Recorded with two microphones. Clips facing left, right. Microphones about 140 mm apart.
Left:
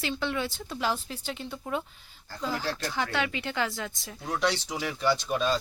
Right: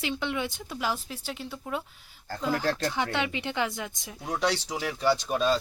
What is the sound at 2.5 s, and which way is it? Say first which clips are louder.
Speech: right 5 dB; 50° right (ahead or behind).